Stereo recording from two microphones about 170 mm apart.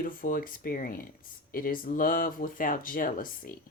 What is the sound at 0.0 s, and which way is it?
Speech, 55° left (ahead or behind).